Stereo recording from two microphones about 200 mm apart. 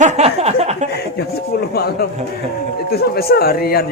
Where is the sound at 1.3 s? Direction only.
50° left (ahead or behind).